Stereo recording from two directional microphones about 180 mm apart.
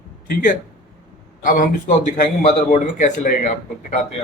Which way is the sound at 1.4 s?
45° left (ahead or behind).